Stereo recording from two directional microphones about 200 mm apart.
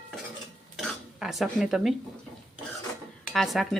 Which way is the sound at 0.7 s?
Centre (ahead or behind).